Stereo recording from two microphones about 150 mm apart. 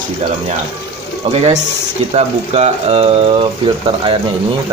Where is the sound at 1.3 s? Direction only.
45° right (ahead or behind).